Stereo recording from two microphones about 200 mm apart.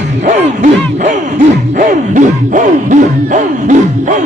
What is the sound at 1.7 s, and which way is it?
Music, 40° right (ahead or behind).